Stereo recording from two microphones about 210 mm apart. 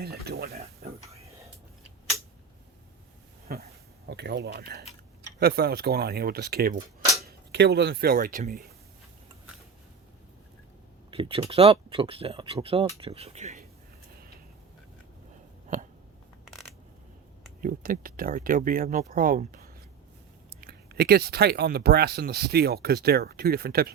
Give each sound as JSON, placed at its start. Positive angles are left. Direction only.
{"t": 0.0, "sound": "speech", "side_deg": -50}
{"t": 3.5, "sound": "a sound", "side_deg": -50}
{"t": 5.4, "sound": "speech", "side_deg": -50}
{"t": 11.1, "sound": "speech", "side_deg": -25}
{"t": 17.6, "sound": "speech", "side_deg": -40}